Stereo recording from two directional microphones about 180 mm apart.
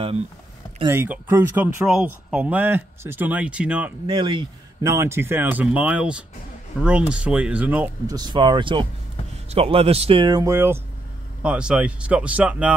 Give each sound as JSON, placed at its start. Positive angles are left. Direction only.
{"t": 0.8, "sound": "speech", "side_deg": -10}
{"t": 4.1, "sound": "speech", "side_deg": -25}
{"t": 8.1, "sound": "speech", "side_deg": -25}